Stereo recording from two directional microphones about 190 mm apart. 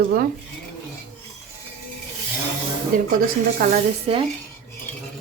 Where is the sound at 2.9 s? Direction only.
45° right (ahead or behind).